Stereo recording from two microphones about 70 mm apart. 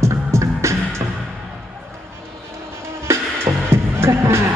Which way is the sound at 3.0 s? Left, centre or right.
Right.